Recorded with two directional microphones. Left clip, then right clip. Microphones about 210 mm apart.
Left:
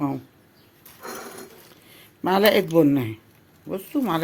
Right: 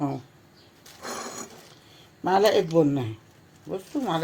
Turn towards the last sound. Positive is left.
turn(degrees=40)  # may be behind; listen again after turning